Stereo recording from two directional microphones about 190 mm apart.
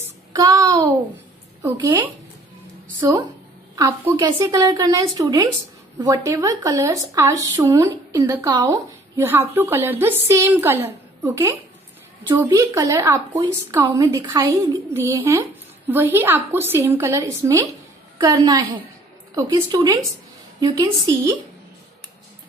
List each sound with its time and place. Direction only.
0.0 s child singing: 15° right (ahead or behind)
1.6 s a woman's voice: 20° right (ahead or behind)